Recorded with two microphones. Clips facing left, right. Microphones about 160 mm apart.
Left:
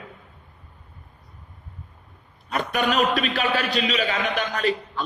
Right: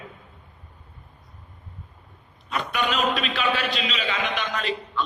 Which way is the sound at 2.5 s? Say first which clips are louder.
Left 3 dB; 40° left (ahead or behind).